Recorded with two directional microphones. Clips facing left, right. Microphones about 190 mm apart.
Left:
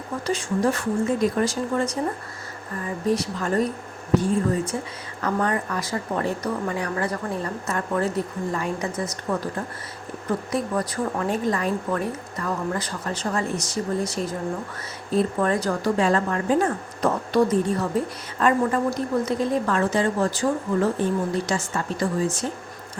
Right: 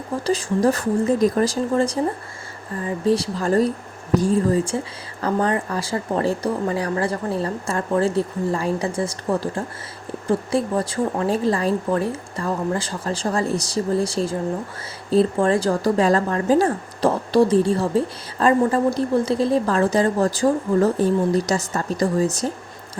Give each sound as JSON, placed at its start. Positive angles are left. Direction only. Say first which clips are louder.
{"t": 0.3, "sound": "speech", "louder": "right 4 dB", "side_deg": -35}